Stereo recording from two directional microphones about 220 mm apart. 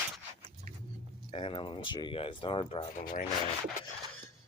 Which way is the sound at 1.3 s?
25° left (ahead or behind).